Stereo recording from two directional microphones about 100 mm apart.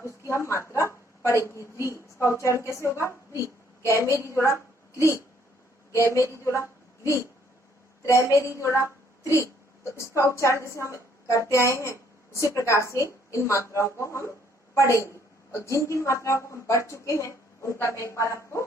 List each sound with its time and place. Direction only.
0.3 s a woman's voice: 30° left (ahead or behind)
8.8 s a sound: 30° left (ahead or behind)
9.8 s a woman's voice: 30° left (ahead or behind)